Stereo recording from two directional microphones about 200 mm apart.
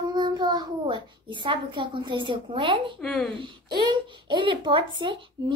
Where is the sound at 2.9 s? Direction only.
5° left (ahead or behind).